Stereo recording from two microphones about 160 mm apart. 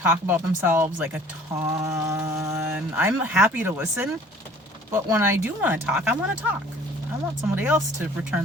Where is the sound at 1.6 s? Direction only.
20° right (ahead or behind).